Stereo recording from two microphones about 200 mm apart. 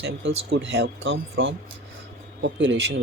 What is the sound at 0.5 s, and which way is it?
Speech, 60° right (ahead or behind).